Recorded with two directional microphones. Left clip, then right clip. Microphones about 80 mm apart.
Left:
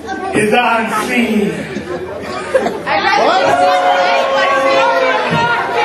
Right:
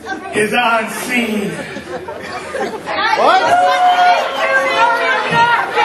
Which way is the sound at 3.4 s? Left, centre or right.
Right.